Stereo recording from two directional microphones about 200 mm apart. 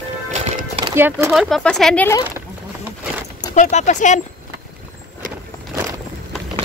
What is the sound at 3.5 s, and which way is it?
Speech, 35° left (ahead or behind).